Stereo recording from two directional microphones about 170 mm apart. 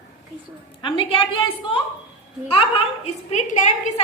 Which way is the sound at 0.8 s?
30° left (ahead or behind).